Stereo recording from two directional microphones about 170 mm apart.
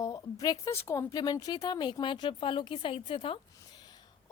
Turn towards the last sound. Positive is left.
turn(degrees=25)  # may be behind; listen again after turning